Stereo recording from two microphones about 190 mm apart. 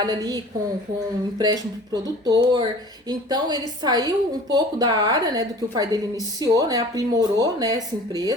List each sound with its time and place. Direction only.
0.0 s speech: 20° right (ahead or behind)